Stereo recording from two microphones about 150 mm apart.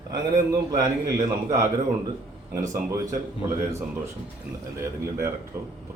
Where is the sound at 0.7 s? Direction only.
25° right (ahead or behind).